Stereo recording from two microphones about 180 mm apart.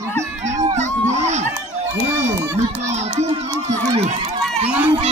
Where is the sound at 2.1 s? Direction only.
15° right (ahead or behind).